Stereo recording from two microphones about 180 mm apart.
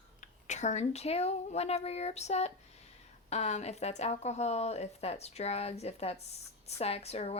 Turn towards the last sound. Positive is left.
turn(degrees=35)  # may be behind; listen again after turning